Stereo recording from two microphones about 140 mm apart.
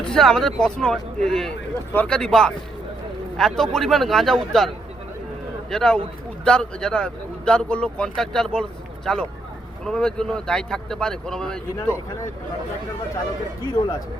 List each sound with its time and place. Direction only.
0.0 s speech: 5° left (ahead or behind)
5.7 s speech: 5° left (ahead or behind)